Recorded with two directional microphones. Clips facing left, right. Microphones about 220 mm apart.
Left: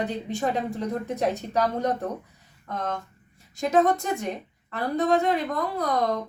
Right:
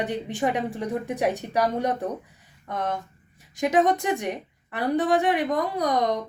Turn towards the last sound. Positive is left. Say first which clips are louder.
# right 1 dB
turn(degrees=-15)  # may be behind; listen again after turning